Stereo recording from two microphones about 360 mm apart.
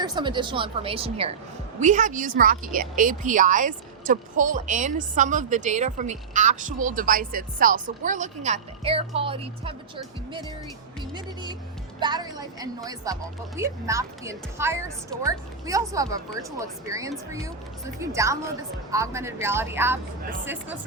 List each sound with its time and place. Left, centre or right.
0.0 s a woman's voice: centre
11.9 s a woman's voice: centre